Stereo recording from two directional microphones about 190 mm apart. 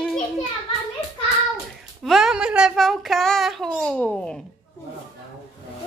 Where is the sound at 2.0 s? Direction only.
Centre (ahead or behind).